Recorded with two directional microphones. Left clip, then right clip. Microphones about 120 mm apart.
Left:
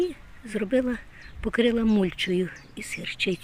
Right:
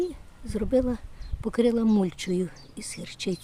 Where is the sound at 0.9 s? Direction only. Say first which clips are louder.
Left 3 dB; 10° right (ahead or behind).